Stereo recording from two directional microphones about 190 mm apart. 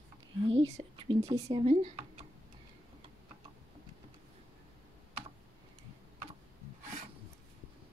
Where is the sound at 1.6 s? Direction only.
30° right (ahead or behind).